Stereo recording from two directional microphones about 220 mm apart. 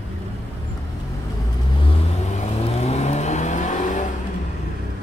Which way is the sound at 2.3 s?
30° left (ahead or behind).